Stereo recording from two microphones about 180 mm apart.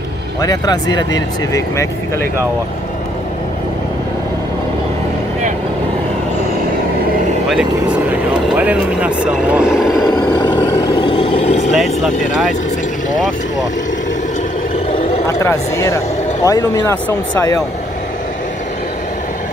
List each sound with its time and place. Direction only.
0.4 s speech: 20° left (ahead or behind)
7.4 s speech: 5° right (ahead or behind)
10.0 s vehicle: 25° left (ahead or behind)
11.7 s speech: centre (ahead or behind)
15.2 s speech: 15° left (ahead or behind)